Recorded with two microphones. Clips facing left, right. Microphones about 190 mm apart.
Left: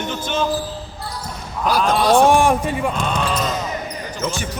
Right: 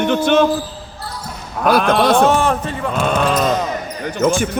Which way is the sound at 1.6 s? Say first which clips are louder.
Right 3 dB; 60° right (ahead or behind).